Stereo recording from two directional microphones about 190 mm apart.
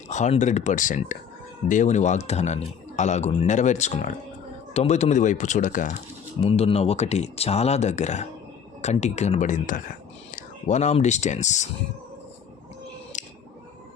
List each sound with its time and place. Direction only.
0.1 s a man's voice: 40° left (ahead or behind)
6.4 s a man's voice: 30° left (ahead or behind)
13.1 s scissors: 40° left (ahead or behind)